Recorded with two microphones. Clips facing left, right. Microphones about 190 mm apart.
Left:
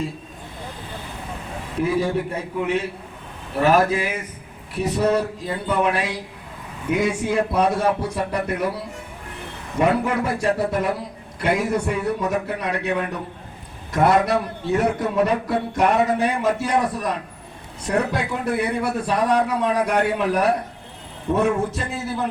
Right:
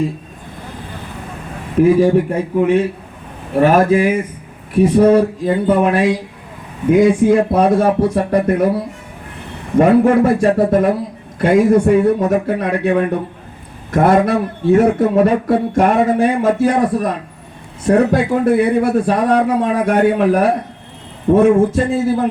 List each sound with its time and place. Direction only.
1.8 s a man's voice: 45° right (ahead or behind)
9.7 s a man's voice: 50° right (ahead or behind)